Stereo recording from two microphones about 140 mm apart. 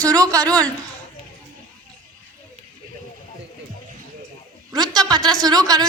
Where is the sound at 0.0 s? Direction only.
25° right (ahead or behind).